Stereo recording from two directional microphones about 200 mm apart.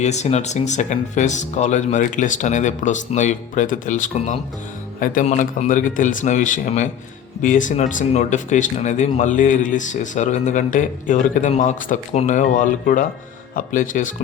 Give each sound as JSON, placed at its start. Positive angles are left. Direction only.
{"t": 0.0, "sound": "speech", "side_deg": 35}